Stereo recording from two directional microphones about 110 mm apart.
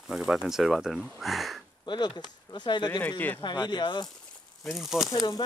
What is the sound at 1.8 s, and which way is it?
Speech, 40° left (ahead or behind).